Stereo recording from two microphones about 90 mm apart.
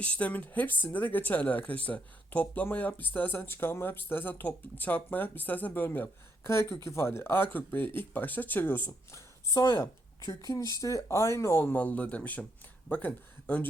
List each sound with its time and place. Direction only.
0.0 s speech: 15° left (ahead or behind)
9.1 s speech: 40° left (ahead or behind); by 13.7 s 20° left (ahead or behind)